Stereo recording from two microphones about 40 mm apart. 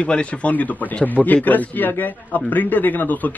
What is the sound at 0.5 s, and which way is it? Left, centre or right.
A man's voice, left.